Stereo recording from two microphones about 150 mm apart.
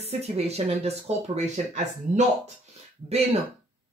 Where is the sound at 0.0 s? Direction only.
45° right (ahead or behind).